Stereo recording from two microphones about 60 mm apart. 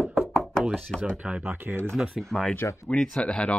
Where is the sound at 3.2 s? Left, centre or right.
Centre.